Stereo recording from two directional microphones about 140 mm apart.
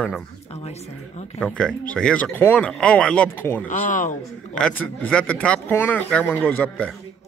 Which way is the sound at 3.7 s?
70° left (ahead or behind).